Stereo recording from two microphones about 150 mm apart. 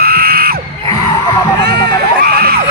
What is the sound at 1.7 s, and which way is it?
Crowd, 90° right.